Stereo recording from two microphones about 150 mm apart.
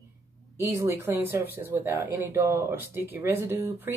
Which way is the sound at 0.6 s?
15° right (ahead or behind).